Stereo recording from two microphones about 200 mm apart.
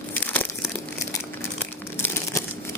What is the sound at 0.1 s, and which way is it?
Crumpling, 10° left (ahead or behind).